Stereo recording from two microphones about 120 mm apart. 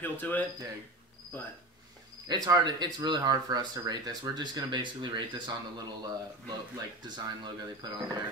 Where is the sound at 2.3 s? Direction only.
35° right (ahead or behind).